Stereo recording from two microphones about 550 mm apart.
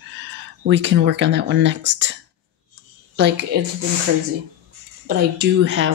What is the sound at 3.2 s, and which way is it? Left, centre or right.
Speech, centre.